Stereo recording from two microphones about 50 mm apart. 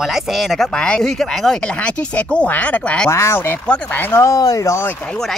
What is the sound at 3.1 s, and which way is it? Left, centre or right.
Speech, left.